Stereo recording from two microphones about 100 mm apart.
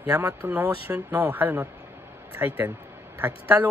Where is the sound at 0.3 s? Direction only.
15° right (ahead or behind).